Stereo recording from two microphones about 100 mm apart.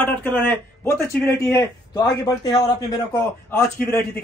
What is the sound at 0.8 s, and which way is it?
Speech, 30° left (ahead or behind).